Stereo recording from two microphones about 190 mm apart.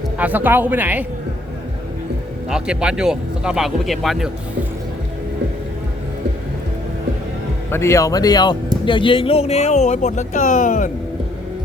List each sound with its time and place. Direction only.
0.2 s speech: 10° right (ahead or behind)
2.5 s speech: 5° right (ahead or behind)
7.7 s speech: 15° left (ahead or behind); by 10.9 s 45° left (ahead or behind)